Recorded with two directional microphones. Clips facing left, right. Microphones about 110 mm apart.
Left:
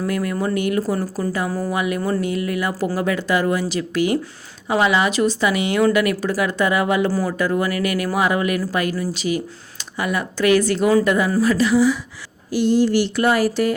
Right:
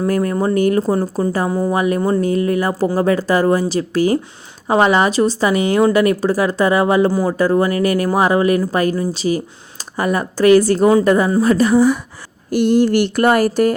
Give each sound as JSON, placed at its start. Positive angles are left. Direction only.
{"t": 0.1, "sound": "speech", "side_deg": -35}
{"t": 0.8, "sound": "speech", "side_deg": -25}
{"t": 1.7, "sound": "speech", "side_deg": -35}
{"t": 11.3, "sound": "speech", "side_deg": -25}
{"t": 11.5, "sound": "speech", "side_deg": -45}